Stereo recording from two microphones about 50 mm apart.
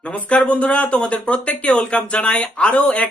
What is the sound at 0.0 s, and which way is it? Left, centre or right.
Speech, left.